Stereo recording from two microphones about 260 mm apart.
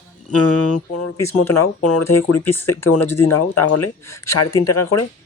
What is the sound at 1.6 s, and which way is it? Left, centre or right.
Speech, left.